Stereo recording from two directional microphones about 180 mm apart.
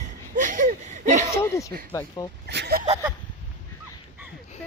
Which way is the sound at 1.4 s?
15° left (ahead or behind).